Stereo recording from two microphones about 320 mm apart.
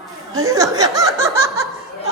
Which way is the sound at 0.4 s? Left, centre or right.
Centre.